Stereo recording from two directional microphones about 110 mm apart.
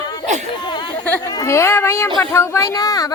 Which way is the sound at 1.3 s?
25° left (ahead or behind).